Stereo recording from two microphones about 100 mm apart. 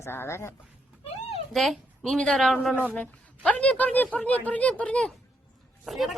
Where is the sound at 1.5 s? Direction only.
Centre (ahead or behind).